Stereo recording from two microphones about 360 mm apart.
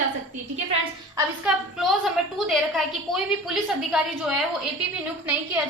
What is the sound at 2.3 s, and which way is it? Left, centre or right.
A woman's voice, centre.